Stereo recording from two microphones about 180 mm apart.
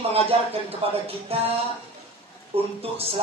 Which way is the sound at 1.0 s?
30° right (ahead or behind).